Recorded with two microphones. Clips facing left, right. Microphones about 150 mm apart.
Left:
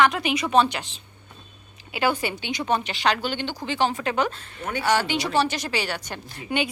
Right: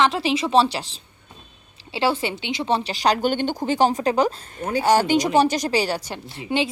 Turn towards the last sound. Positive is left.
turn(degrees=-25)  # may be behind; listen again after turning